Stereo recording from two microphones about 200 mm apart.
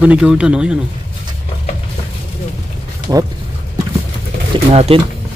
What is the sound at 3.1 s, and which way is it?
Speech, 15° right (ahead or behind).